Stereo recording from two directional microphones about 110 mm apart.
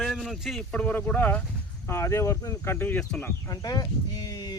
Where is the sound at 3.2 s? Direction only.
30° left (ahead or behind).